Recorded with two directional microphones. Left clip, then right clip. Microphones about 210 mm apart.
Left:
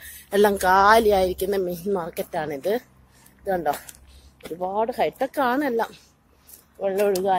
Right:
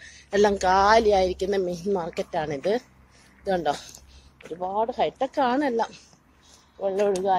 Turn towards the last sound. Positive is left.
turn(degrees=5)  # may be behind; listen again after turning